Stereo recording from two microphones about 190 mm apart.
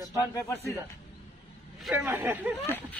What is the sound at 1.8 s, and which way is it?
Speech, centre (ahead or behind).